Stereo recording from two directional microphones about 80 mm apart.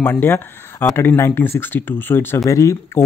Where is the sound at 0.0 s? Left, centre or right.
Left.